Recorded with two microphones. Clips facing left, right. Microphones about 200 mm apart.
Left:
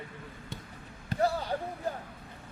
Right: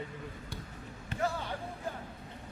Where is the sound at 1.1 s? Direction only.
35° left (ahead or behind).